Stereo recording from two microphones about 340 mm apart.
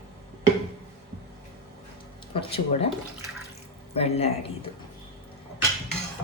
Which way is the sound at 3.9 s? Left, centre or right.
Centre.